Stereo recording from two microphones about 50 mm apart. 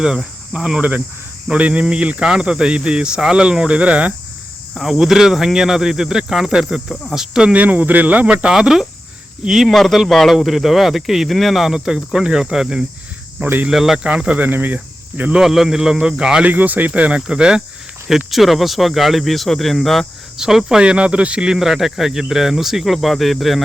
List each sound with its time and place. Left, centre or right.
0.5 s speech: centre
0.8 s speech: right
4.8 s speech: centre
7.5 s speech: right
8.4 s speech: centre
9.6 s speech: centre
11.7 s speech: centre
14.0 s speech: centre
14.4 s speech: right
15.4 s speech: centre
16.5 s speech: right; by 17.6 s centre
18.3 s speech: centre
20.4 s speech: centre